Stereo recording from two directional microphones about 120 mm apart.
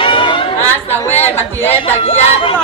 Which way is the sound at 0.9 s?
15° left (ahead or behind).